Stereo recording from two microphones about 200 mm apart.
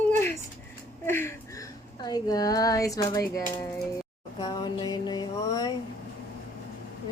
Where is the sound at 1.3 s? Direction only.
15° left (ahead or behind).